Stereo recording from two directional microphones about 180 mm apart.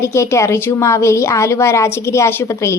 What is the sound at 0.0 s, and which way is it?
Speech, 15° left (ahead or behind).